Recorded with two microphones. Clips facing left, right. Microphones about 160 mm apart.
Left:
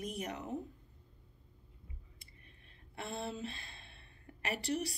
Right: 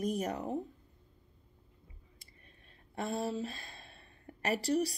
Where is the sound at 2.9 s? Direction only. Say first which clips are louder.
Right 6 dB; 40° right (ahead or behind).